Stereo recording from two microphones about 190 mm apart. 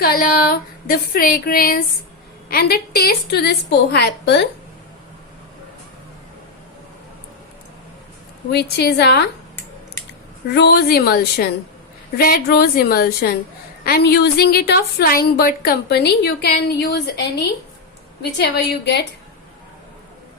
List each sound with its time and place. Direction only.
0.0 s a woman's voice: 50° left (ahead or behind)
8.5 s a woman's voice: 60° left (ahead or behind)
10.5 s a woman's voice: 60° left (ahead or behind)
18.2 s a woman's voice: 60° left (ahead or behind)